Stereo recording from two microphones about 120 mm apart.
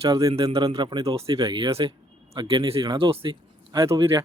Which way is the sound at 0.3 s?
50° right (ahead or behind).